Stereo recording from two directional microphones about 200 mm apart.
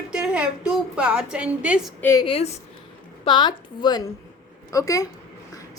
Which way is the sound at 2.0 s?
15° left (ahead or behind).